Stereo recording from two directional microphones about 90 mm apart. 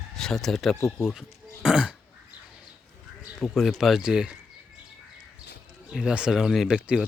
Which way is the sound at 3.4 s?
Centre (ahead or behind).